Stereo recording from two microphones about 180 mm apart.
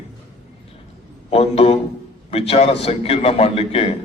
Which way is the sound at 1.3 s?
35° left (ahead or behind).